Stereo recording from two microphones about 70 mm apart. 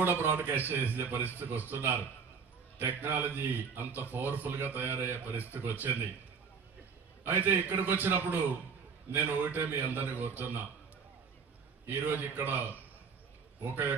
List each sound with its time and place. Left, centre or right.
0.0 s a man's voice: right
7.2 s a man's voice: right
11.8 s a man's voice: right